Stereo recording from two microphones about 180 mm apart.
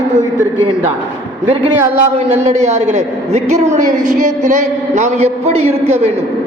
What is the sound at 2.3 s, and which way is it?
A woman's voice, 40° right (ahead or behind).